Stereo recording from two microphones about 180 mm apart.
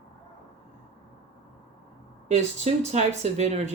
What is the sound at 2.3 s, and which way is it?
Speech, 40° right (ahead or behind).